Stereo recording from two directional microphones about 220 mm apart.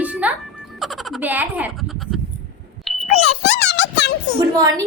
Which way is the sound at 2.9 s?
Centre (ahead or behind).